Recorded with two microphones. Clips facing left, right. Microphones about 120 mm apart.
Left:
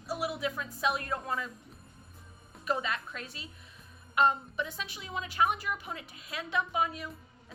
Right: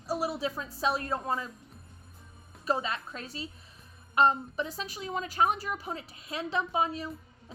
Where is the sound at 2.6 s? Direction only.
35° right (ahead or behind).